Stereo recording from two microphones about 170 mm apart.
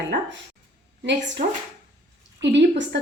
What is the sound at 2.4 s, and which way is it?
Speech, 90° right.